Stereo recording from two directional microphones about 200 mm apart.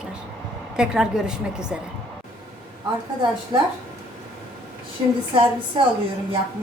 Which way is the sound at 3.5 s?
20° right (ahead or behind).